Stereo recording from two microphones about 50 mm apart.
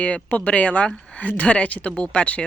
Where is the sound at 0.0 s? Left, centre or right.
Left.